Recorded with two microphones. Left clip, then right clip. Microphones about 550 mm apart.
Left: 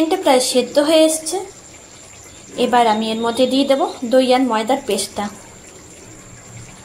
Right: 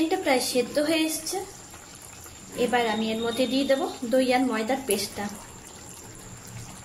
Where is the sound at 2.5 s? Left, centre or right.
Right.